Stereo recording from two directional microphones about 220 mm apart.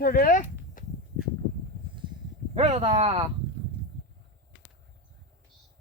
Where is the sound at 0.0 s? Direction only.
40° left (ahead or behind).